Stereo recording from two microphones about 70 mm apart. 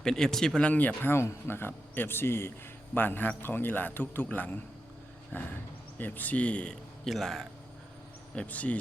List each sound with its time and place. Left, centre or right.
0.0 s speech: centre
0.7 s a man's voice: left
1.1 s a man's voice: left; by 6.7 s centre
7.0 s speech: centre
8.4 s a man's voice: left